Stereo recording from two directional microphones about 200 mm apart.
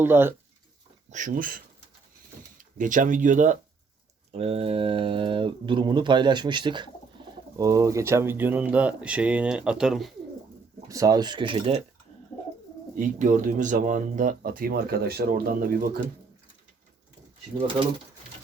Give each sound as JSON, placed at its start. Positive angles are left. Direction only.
{"t": 0.0, "sound": "speech", "side_deg": -10}
{"t": 1.1, "sound": "speech", "side_deg": -40}
{"t": 10.8, "sound": "speech", "side_deg": -15}
{"t": 13.0, "sound": "speech", "side_deg": -40}